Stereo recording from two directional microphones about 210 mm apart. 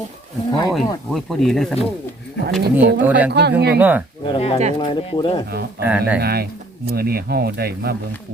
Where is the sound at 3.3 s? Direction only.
50° right (ahead or behind).